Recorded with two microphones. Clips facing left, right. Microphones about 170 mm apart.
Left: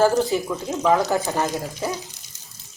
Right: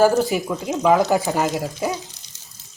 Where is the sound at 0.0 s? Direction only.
10° right (ahead or behind).